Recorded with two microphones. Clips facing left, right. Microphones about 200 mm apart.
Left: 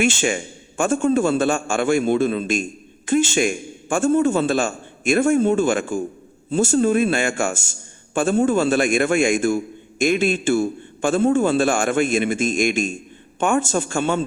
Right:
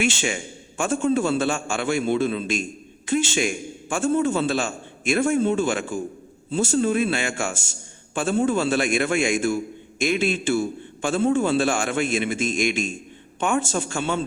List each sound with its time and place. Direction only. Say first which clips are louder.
0.0 s a man's voice: left 4 dB; 50° left (ahead or behind)